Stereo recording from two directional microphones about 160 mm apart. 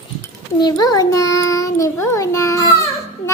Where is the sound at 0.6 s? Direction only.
25° left (ahead or behind).